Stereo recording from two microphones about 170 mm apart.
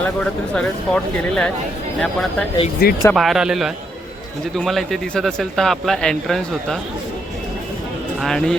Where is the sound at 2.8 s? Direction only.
65° left (ahead or behind).